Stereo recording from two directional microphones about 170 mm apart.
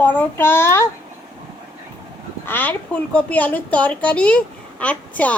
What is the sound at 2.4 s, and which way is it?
A woman's voice, 10° left (ahead or behind).